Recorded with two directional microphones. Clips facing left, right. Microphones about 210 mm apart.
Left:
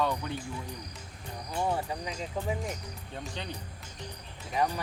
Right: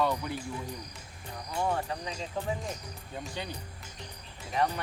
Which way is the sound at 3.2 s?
5° right (ahead or behind).